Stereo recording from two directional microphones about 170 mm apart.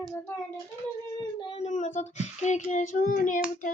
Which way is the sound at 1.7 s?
45° left (ahead or behind).